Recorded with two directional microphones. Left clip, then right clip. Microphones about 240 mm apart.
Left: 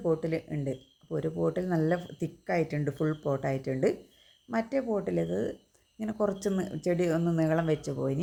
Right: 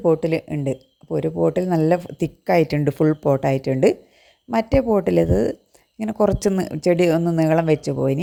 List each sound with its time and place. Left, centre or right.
0.0 s speech: right